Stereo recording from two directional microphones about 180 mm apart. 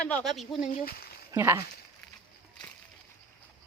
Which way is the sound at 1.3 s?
10° right (ahead or behind).